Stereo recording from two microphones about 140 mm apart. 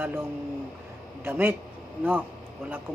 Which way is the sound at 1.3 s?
15° right (ahead or behind).